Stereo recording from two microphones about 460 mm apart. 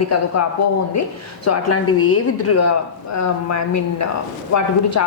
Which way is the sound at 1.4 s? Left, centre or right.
Left.